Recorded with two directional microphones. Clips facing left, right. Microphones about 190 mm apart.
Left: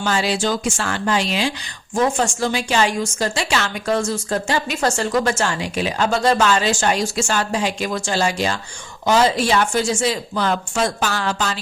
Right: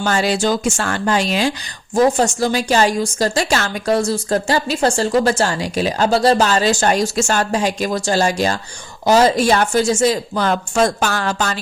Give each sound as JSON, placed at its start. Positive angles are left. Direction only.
{"t": 0.0, "sound": "a woman's voice", "side_deg": -45}